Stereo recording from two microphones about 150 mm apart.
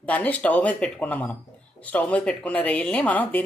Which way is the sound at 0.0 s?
10° left (ahead or behind).